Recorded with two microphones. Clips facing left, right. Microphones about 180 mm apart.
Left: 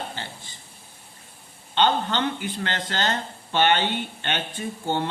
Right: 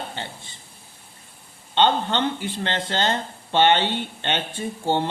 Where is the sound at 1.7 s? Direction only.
25° right (ahead or behind).